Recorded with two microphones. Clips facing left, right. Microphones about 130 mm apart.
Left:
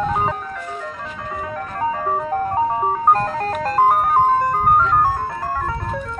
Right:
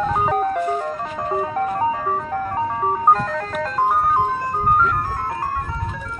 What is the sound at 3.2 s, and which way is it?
Music, 45° left (ahead or behind).